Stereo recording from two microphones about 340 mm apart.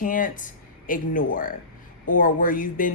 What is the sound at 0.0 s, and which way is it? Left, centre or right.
Speech, left.